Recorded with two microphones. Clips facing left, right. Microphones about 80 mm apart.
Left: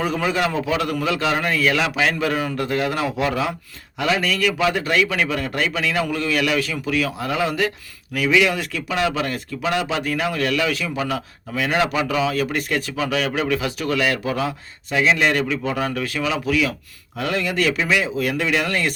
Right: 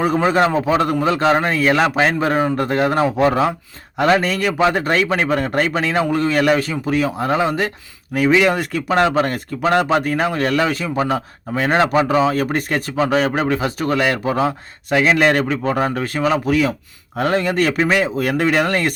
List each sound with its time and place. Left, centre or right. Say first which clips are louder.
0.0 s speech: right 6 dB; right
14.8 s a man's voice: right 4 dB; right